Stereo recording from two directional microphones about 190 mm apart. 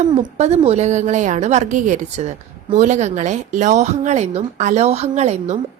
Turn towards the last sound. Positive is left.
turn(degrees=-35)  # may be behind; listen again after turning